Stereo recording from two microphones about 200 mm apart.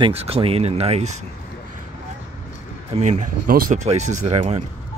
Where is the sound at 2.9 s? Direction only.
35° right (ahead or behind).